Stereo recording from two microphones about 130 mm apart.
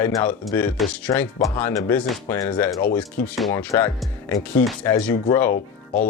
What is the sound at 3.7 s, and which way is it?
Speech, 25° left (ahead or behind).